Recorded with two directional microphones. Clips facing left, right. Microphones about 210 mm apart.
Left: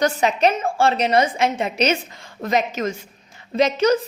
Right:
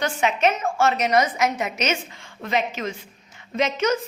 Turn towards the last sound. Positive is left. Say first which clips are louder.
# left 5 dB
turn(degrees=35)  # may be behind; listen again after turning